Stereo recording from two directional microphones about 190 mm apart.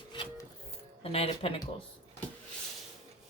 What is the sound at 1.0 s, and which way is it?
Speech, 30° left (ahead or behind).